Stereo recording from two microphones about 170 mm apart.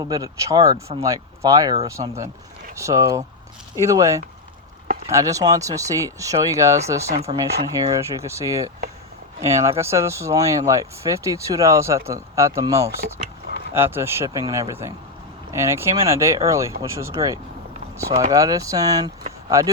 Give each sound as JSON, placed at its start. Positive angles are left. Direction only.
{"t": 0.0, "sound": "speech", "side_deg": -20}